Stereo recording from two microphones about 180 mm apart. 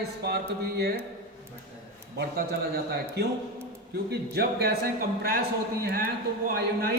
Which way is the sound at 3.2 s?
65° right (ahead or behind).